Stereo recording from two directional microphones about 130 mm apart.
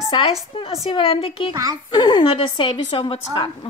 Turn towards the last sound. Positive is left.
turn(degrees=40)  # may be behind; listen again after turning